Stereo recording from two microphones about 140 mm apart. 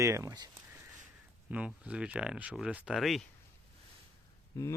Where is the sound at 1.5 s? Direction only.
10° right (ahead or behind).